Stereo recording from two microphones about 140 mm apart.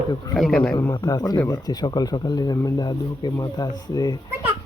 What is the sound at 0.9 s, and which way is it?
Speech, 25° left (ahead or behind).